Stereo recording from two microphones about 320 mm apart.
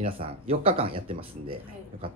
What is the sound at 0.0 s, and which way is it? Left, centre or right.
Speech, centre.